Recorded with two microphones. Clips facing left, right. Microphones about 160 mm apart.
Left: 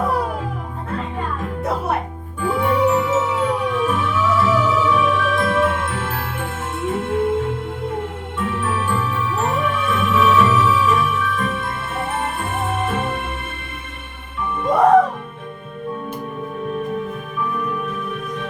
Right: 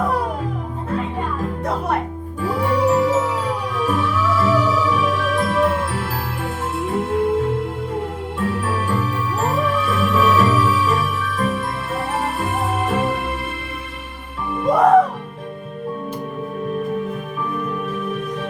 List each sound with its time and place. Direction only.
2.4 s music: 35° right (ahead or behind)
17.8 s music: 35° right (ahead or behind)